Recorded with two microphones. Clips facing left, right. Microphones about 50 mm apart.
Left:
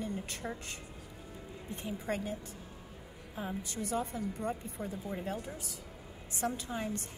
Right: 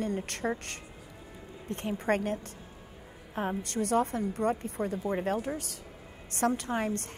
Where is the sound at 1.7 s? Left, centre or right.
Right.